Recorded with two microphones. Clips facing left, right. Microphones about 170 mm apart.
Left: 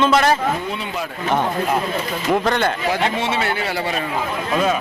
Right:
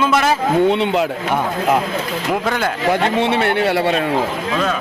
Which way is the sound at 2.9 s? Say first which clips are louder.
Right 4 dB; 55° right (ahead or behind).